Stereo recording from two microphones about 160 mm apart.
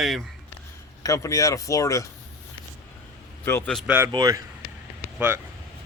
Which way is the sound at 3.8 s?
10° right (ahead or behind).